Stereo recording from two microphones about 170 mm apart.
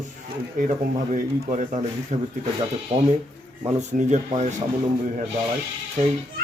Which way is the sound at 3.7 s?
40° right (ahead or behind).